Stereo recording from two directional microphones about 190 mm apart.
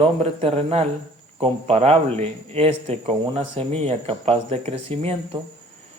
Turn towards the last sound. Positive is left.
turn(degrees=-30)  # may be behind; listen again after turning